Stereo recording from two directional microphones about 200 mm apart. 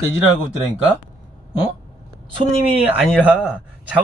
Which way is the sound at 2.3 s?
30° right (ahead or behind).